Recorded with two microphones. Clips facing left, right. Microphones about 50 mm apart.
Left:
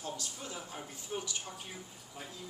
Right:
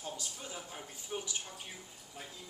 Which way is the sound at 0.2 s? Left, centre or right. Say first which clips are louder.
Left 1 dB; centre.